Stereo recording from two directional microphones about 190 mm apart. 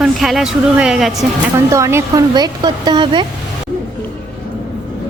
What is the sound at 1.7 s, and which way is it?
Speech, 15° right (ahead or behind).